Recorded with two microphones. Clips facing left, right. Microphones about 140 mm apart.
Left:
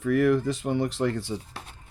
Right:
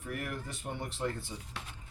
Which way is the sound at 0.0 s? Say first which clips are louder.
Left 17 dB; 90° left.